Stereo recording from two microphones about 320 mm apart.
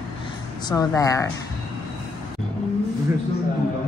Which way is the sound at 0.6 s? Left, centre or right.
Centre.